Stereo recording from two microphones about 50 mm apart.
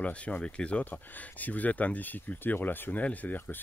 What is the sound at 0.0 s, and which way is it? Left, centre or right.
Speech, left.